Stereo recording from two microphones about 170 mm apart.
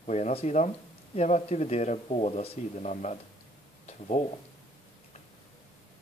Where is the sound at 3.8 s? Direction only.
40° left (ahead or behind).